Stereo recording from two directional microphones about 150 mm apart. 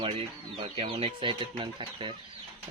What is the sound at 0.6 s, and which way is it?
Speech, 40° right (ahead or behind).